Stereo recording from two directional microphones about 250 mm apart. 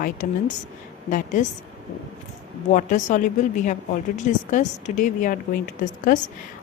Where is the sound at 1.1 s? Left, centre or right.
Left.